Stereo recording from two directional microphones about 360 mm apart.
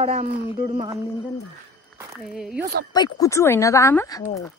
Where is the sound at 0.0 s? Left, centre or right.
Centre.